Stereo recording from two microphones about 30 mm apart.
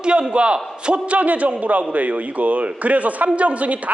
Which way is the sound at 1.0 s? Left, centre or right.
Right.